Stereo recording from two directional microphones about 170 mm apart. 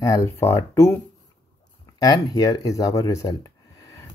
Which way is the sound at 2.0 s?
20° left (ahead or behind).